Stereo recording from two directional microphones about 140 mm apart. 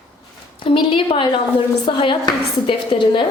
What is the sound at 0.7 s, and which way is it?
A woman's voice, 35° left (ahead or behind).